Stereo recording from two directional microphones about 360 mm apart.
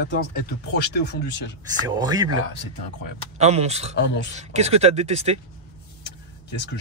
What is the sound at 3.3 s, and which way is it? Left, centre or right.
Speech, centre.